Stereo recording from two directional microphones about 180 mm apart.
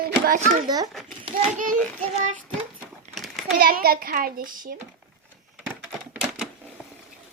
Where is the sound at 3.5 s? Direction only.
55° right (ahead or behind).